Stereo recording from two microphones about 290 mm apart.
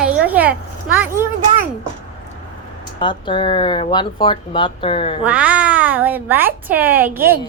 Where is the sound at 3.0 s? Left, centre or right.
Centre.